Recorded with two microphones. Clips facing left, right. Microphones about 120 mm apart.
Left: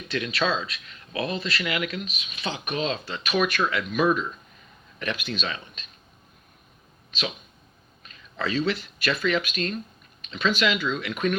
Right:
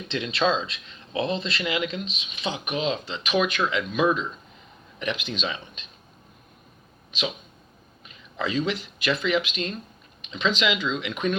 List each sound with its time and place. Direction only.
0.1 s speech: 25° right (ahead or behind)
7.1 s speech: 20° right (ahead or behind)